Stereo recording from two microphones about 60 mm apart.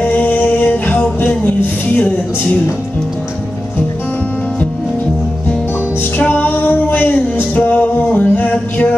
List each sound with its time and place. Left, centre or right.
0.0 s music: left
6.1 s music: left